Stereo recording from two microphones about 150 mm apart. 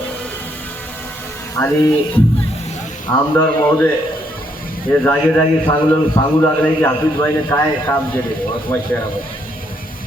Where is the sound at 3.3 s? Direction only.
10° left (ahead or behind).